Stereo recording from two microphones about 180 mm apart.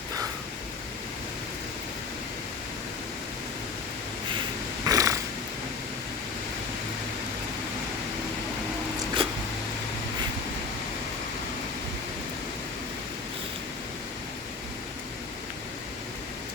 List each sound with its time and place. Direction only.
4.9 s cat: 20° right (ahead or behind)
9.2 s cat: 30° right (ahead or behind)